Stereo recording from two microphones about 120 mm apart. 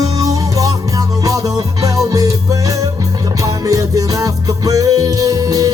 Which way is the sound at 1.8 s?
30° right (ahead or behind).